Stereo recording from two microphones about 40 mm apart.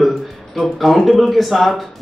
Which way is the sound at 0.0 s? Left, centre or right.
Centre.